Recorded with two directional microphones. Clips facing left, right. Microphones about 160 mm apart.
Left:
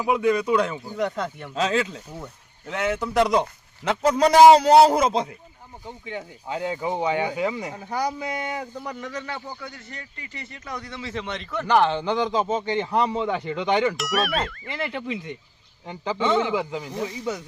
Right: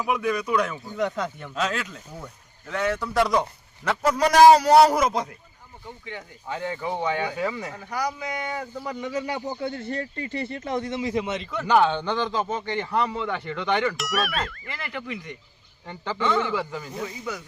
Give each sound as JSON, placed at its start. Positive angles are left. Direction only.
{"t": 0.0, "sound": "speech", "side_deg": 25}
{"t": 0.9, "sound": "a man's voice", "side_deg": 5}
{"t": 1.5, "sound": "speech", "side_deg": 30}
{"t": 2.0, "sound": "speech", "side_deg": 15}
{"t": 8.8, "sound": "speech", "side_deg": -5}
{"t": 9.2, "sound": "speech", "side_deg": -15}
{"t": 9.6, "sound": "a man's voice", "side_deg": -30}
{"t": 13.9, "sound": "a man's voice", "side_deg": 0}
{"t": 14.7, "sound": "speech", "side_deg": 20}